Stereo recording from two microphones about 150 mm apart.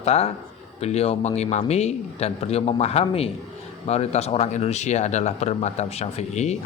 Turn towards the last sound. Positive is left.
turn(degrees=50)  # may be behind; listen again after turning